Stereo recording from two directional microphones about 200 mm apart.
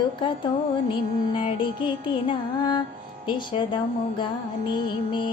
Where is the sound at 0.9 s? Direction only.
25° left (ahead or behind).